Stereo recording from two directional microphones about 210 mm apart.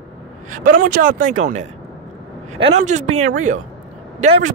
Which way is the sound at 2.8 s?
35° right (ahead or behind).